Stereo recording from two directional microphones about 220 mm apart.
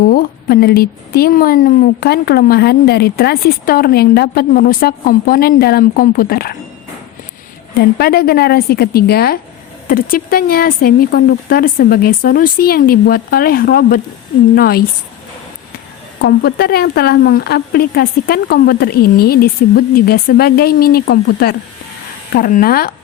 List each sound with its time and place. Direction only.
0.0 s a woman's voice: 40° left (ahead or behind)
7.9 s a woman's voice: 45° left (ahead or behind)
16.2 s a woman's voice: 45° left (ahead or behind)